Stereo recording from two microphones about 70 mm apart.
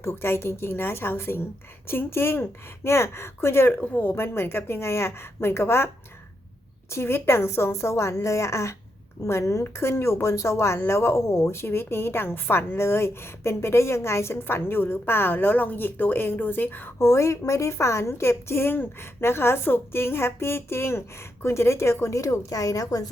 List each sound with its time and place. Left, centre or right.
0.0 s speech: left
3.7 s speech: left
6.9 s a woman's voice: left
17.0 s a woman's voice: left